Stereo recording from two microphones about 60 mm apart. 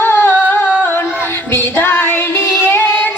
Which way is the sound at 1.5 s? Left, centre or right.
Left.